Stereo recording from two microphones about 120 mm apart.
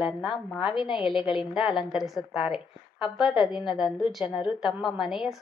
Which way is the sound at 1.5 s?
5° right (ahead or behind).